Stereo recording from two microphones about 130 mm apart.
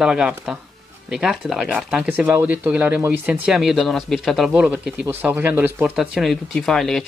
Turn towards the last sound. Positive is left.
turn(degrees=5)  # may be behind; listen again after turning